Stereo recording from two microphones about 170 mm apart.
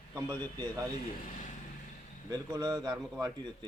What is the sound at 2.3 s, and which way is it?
A man's voice, 20° right (ahead or behind).